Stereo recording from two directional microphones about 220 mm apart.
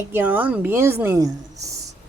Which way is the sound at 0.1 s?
10° right (ahead or behind).